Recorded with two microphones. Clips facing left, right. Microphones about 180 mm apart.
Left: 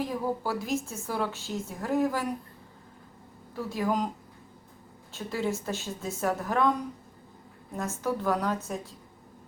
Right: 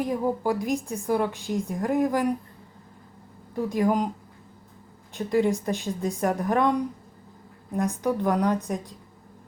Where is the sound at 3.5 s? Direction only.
15° right (ahead or behind).